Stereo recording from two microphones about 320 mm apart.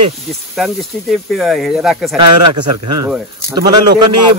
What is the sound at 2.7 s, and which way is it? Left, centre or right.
Speech, right.